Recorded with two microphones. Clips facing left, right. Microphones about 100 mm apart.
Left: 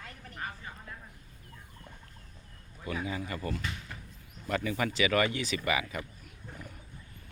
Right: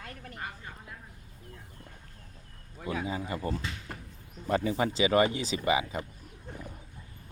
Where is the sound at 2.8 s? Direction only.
25° right (ahead or behind).